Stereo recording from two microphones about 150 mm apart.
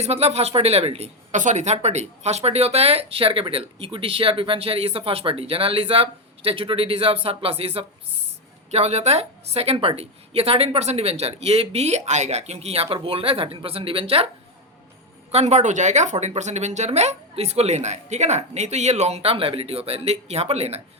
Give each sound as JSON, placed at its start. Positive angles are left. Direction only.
{"t": 0.0, "sound": "a woman's voice", "side_deg": -45}
{"t": 15.3, "sound": "a woman's voice", "side_deg": -50}